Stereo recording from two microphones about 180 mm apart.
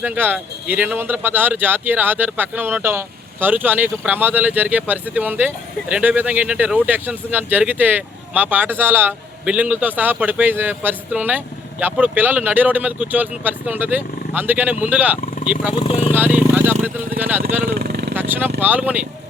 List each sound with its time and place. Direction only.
0.0 s speech: 10° right (ahead or behind)
15.7 s speech: 35° left (ahead or behind)
16.1 s speech: 10° right (ahead or behind)
17.7 s vehicle: 60° right (ahead or behind)
18.1 s a sound: 10° right (ahead or behind)
18.6 s speech: 10° right (ahead or behind)